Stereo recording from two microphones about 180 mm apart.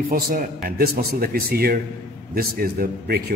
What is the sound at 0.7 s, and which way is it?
A man's voice, 55° right (ahead or behind).